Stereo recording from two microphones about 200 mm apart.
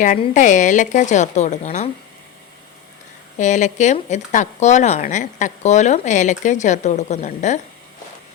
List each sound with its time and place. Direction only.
0.2 s a woman's voice: 40° left (ahead or behind)
3.3 s a woman's voice: 35° left (ahead or behind)